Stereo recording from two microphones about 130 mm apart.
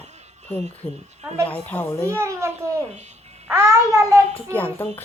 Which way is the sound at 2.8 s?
60° right (ahead or behind).